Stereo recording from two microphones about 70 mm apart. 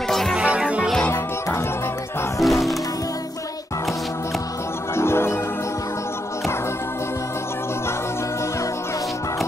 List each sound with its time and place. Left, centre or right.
0.4 s music: centre
2.4 s music: centre
4.9 s music: left